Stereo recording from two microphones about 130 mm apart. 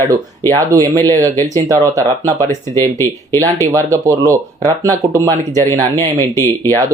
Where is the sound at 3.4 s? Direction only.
25° right (ahead or behind).